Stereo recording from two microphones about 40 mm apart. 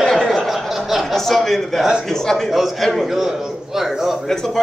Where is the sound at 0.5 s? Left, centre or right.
Centre.